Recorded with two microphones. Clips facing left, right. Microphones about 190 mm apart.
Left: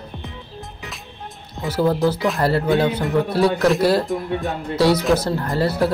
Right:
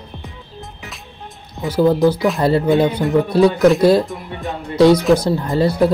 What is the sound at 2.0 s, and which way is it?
Speech, 15° right (ahead or behind).